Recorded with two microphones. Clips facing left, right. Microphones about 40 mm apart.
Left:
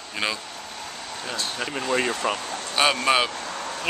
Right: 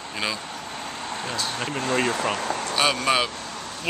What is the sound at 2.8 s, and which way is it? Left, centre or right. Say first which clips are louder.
Speech: left 2 dB; centre.